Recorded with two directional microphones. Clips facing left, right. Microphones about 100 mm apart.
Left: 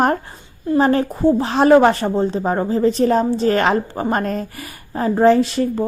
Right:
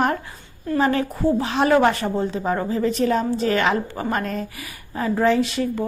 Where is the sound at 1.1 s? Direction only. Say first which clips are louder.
Left 5 dB; 25° left (ahead or behind).